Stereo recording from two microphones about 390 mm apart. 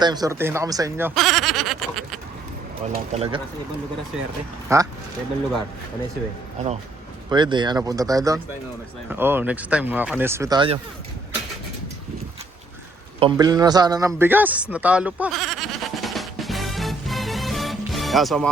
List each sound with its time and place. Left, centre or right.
0.0 s speech: centre
2.9 s speech: centre
4.7 s speech: centre
7.3 s speech: centre
13.1 s speech: centre
14.1 s a sound: centre